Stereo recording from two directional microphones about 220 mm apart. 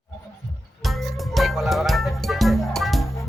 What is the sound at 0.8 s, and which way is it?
Music, centre (ahead or behind).